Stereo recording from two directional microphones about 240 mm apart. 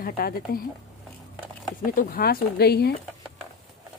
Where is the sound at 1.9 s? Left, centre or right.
Left.